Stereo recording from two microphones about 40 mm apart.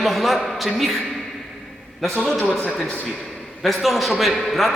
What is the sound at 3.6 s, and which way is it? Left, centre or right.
A man's voice, centre.